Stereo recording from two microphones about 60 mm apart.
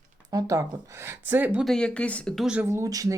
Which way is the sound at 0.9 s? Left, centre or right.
Right.